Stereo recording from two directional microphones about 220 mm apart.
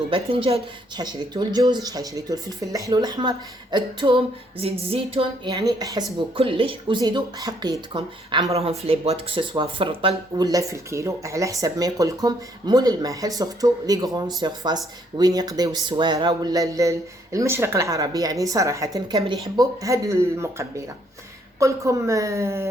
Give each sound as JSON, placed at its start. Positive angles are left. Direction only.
{"t": 0.1, "sound": "speech", "side_deg": -25}